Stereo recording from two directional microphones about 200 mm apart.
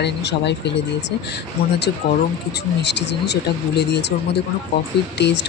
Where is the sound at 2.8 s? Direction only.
60° left (ahead or behind).